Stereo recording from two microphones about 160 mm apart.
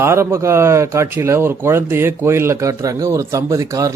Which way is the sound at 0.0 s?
15° right (ahead or behind).